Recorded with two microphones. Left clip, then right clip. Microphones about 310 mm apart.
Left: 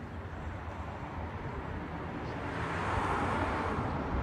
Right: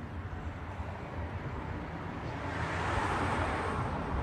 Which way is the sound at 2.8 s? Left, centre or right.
Right.